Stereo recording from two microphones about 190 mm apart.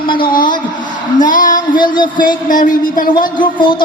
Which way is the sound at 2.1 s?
45° left (ahead or behind).